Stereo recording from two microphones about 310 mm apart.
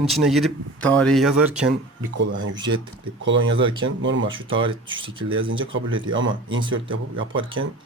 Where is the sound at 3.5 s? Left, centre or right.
Centre.